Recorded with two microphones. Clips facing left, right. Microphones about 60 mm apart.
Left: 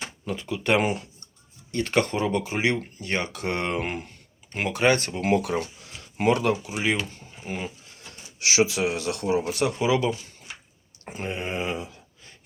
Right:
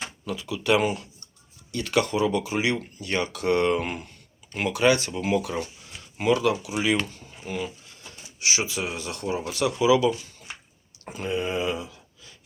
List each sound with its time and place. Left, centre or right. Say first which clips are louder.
0.3 s speech: right 1 dB; left
4.9 s speech: left 2 dB; left
7.4 s speech: right 1 dB; left
7.9 s speech: even; left
9.5 s speech: right 2 dB; left
11.1 s a sound: right 3 dB; left